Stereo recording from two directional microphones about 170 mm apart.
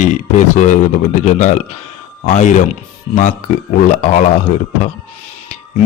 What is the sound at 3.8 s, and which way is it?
Speech, 45° left (ahead or behind).